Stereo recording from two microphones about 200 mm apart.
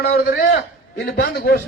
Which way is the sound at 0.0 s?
50° left (ahead or behind).